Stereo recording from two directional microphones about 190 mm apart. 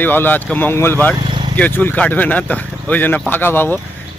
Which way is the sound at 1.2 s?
25° right (ahead or behind).